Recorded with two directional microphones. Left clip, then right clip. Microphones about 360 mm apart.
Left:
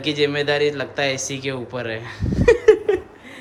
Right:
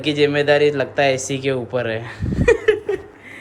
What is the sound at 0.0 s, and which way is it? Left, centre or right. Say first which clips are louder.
Speech: right 3 dB; centre.